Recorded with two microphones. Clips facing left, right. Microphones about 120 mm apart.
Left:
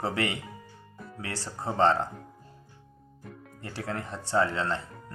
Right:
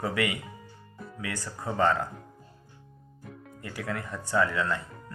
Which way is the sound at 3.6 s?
30° left (ahead or behind).